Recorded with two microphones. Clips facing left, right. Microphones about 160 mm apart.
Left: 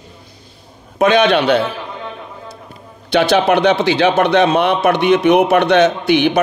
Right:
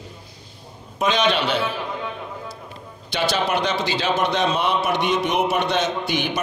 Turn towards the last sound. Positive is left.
turn(degrees=65)  # may be behind; listen again after turning